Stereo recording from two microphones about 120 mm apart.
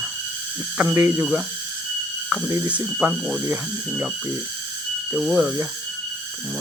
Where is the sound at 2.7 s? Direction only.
10° right (ahead or behind).